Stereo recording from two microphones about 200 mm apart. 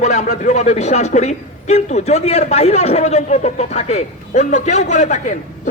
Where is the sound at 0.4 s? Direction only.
35° left (ahead or behind).